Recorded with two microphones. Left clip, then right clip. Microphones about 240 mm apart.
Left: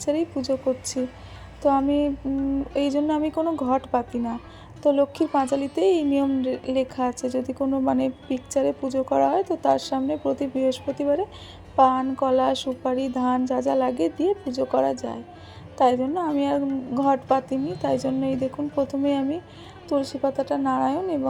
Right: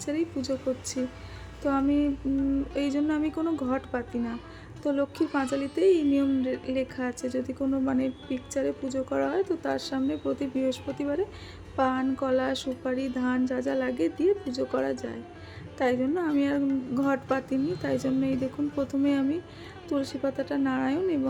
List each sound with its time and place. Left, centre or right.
0.0 s a woman's voice: centre
3.4 s speech: centre
3.7 s a woman's voice: centre
12.4 s a woman's voice: centre
14.4 s speech: centre
14.8 s a woman's voice: centre
18.3 s a woman's voice: centre